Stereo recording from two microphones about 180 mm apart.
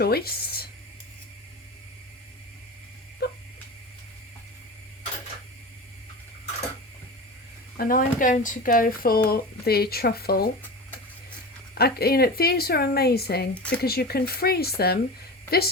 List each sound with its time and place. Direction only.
0.0 s a sound: 60° left (ahead or behind)
3.2 s dog: 65° left (ahead or behind)
7.8 s speech: 50° left (ahead or behind)
11.7 s speech: 60° left (ahead or behind)
13.5 s speech: 5° left (ahead or behind)
13.8 s a woman's voice: 60° left (ahead or behind)